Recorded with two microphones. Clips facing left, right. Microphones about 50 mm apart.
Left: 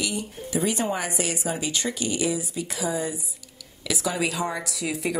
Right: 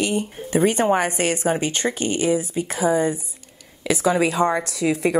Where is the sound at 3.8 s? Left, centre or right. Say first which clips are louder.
Right 7 dB; right.